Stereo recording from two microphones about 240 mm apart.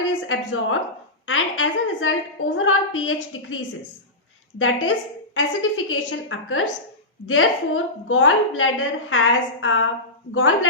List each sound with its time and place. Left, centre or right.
0.1 s a woman's voice: left